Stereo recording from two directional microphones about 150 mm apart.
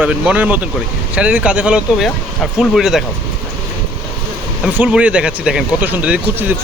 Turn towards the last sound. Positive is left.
turn(degrees=-10)  # may be behind; listen again after turning